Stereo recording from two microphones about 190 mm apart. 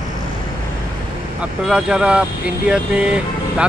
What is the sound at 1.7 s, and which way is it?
Speech, 5° right (ahead or behind).